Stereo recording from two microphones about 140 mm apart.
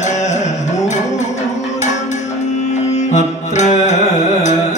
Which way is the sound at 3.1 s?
55° left (ahead or behind).